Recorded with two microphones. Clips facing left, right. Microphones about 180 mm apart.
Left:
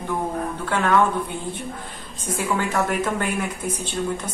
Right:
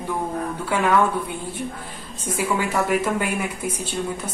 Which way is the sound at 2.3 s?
10° right (ahead or behind).